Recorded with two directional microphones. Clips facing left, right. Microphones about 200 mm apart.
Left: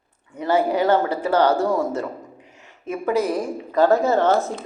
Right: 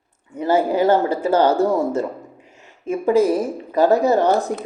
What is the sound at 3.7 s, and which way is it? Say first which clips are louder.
Speech: right 2 dB; 20° right (ahead or behind).